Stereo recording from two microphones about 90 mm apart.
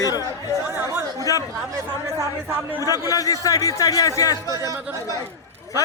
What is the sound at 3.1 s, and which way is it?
A man's voice, 40° left (ahead or behind).